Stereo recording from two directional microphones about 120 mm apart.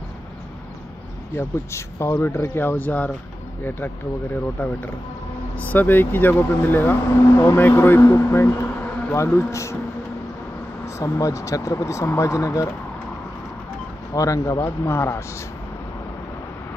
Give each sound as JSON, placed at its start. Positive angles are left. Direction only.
{"t": 1.3, "sound": "speech", "side_deg": 20}
{"t": 4.6, "sound": "speech", "side_deg": 15}
{"t": 10.9, "sound": "speech", "side_deg": 25}
{"t": 14.1, "sound": "speech", "side_deg": 25}